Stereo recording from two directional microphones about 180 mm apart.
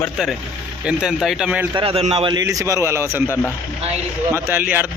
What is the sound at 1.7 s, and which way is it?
Speech, 30° right (ahead or behind).